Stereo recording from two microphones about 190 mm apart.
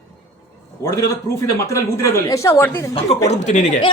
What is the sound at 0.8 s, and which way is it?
A man's voice, 15° left (ahead or behind).